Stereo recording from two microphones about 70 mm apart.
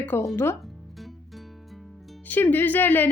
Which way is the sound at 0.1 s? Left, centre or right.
Left.